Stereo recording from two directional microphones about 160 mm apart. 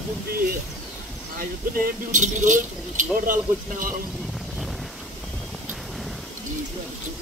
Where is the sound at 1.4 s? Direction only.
65° right (ahead or behind).